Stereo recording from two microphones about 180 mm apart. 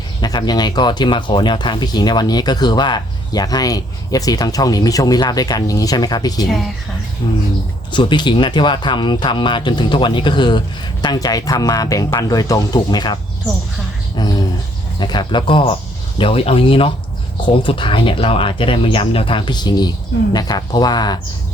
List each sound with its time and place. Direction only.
0.2 s speech: 25° left (ahead or behind)
14.2 s speech: 20° left (ahead or behind)